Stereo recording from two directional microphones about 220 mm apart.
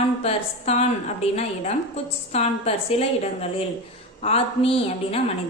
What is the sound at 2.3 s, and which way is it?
A woman's voice, 30° left (ahead or behind).